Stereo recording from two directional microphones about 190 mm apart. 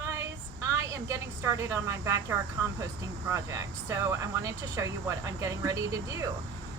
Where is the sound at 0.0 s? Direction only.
15° right (ahead or behind).